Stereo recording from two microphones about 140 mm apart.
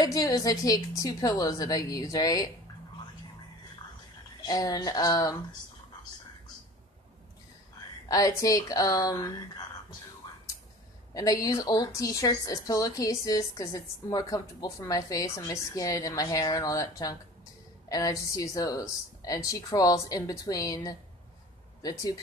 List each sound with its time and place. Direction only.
0.0 s a woman's voice: 25° left (ahead or behind)
4.4 s a woman's voice: 30° left (ahead or behind)
8.1 s a woman's voice: 25° left (ahead or behind)
11.1 s a woman's voice: 25° left (ahead or behind)